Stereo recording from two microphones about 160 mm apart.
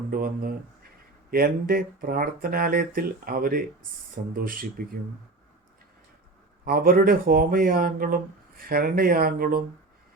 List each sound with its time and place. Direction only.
0.1 s speech: 65° right (ahead or behind)
6.7 s speech: 65° right (ahead or behind)